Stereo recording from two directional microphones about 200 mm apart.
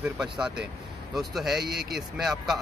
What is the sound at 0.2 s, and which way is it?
Speech, 5° right (ahead or behind).